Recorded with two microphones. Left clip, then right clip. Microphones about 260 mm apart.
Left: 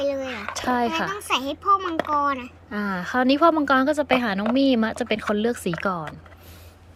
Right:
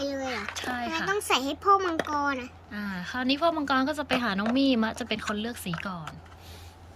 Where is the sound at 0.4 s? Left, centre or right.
Centre.